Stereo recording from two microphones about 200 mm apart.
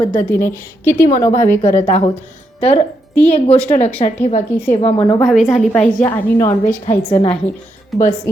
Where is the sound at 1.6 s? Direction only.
35° left (ahead or behind).